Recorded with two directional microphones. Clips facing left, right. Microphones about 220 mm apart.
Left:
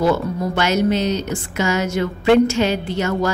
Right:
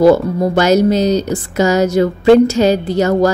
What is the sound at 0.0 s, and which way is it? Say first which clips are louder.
Speech: right 8 dB; 40° right (ahead or behind).